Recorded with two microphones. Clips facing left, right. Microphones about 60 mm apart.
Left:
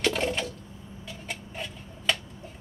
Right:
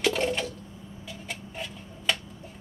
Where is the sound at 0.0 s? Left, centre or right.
Centre.